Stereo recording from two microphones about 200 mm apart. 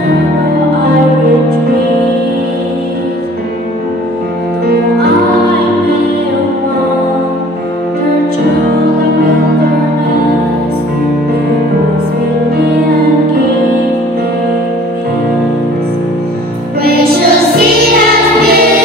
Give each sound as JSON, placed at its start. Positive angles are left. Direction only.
{"t": 16.8, "sound": "music", "side_deg": -50}